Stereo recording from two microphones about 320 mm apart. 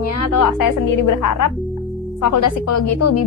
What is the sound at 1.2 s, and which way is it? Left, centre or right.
Speech, left.